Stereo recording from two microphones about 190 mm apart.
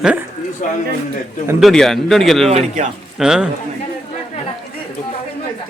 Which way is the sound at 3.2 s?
5° right (ahead or behind).